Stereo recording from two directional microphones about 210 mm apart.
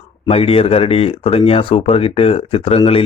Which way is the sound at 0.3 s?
30° left (ahead or behind).